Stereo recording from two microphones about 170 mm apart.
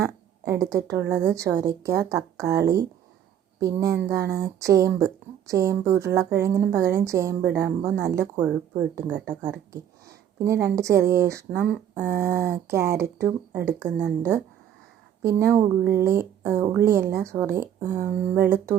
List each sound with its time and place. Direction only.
0.0 s a woman's voice: 20° right (ahead or behind)
15.9 s speech: 15° right (ahead or behind)